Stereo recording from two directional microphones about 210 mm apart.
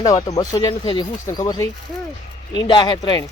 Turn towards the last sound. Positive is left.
turn(degrees=20)  # may be behind; listen again after turning